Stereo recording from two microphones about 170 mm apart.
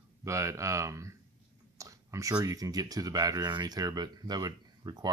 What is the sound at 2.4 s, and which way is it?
Speech, 20° right (ahead or behind).